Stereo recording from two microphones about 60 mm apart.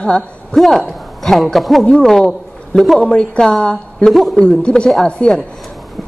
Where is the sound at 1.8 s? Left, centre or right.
Centre.